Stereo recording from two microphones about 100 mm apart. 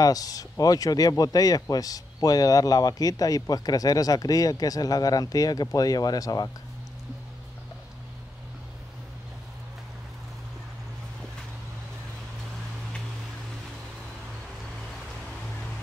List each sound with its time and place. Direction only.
0.0 s speech: 35° left (ahead or behind)